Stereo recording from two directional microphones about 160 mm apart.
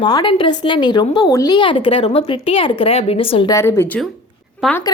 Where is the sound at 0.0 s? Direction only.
25° left (ahead or behind).